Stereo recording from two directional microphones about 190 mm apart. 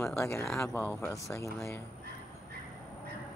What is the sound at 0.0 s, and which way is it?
Speech, 15° left (ahead or behind).